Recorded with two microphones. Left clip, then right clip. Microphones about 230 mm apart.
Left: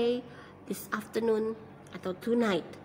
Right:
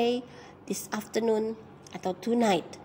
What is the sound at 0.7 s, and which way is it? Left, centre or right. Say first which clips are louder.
A woman's voice: right 1 dB; centre.